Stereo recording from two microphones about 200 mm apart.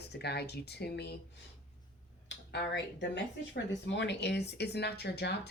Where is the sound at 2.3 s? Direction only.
60° left (ahead or behind).